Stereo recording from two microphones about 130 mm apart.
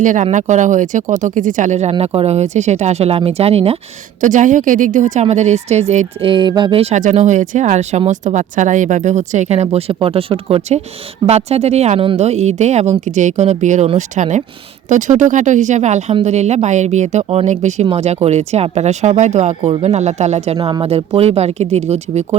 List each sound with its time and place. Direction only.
0.0 s speech: 75° right (ahead or behind); by 3.8 s 50° right (ahead or behind)
4.2 s a woman's voice: 75° right (ahead or behind); by 6.1 s 60° right (ahead or behind)
6.2 s speech: 40° right (ahead or behind)
6.9 s a woman's voice: 70° right (ahead or behind)